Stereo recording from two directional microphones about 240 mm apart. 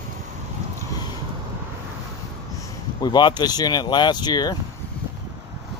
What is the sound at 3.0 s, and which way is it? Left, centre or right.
Speech, centre.